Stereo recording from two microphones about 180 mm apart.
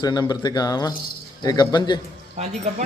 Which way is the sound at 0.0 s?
20° left (ahead or behind).